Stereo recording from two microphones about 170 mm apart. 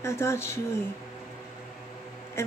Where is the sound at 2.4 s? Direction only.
15° left (ahead or behind).